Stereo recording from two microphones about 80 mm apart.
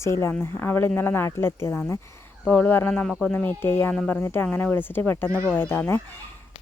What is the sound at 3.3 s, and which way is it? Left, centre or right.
Speech, left.